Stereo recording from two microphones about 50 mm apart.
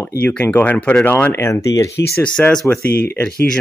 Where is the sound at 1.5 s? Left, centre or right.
Left.